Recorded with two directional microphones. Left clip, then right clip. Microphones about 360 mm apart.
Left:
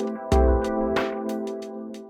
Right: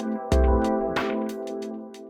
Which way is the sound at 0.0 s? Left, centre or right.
Centre.